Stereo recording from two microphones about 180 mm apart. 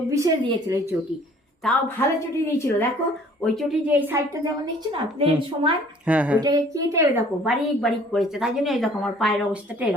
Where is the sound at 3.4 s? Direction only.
Centre (ahead or behind).